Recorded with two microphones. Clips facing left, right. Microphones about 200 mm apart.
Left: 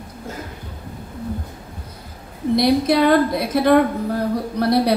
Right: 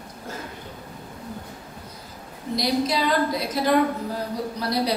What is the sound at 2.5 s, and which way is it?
A woman's voice, 60° left (ahead or behind).